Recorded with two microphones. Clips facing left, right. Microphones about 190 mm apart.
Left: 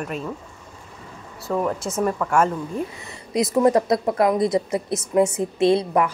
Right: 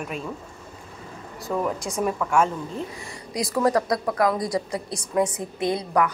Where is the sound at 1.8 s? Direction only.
15° right (ahead or behind).